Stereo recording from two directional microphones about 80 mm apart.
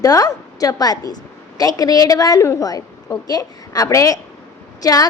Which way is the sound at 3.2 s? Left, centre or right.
Left.